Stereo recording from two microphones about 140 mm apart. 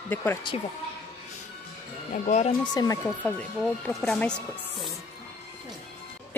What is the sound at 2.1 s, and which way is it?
Speech, 55° left (ahead or behind).